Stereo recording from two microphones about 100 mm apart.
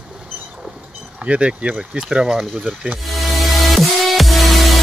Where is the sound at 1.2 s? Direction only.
10° right (ahead or behind).